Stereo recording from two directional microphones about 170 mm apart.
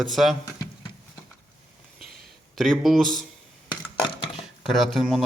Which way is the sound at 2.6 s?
Centre (ahead or behind).